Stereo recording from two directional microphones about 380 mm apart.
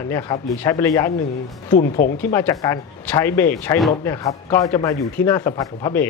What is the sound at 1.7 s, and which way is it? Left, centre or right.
Speech, left.